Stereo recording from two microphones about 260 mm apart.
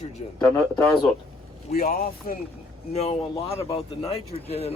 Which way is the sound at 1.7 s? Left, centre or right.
Left.